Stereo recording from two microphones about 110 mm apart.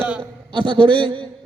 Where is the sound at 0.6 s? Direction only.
50° right (ahead or behind).